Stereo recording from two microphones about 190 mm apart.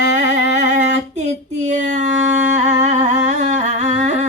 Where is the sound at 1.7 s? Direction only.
40° right (ahead or behind).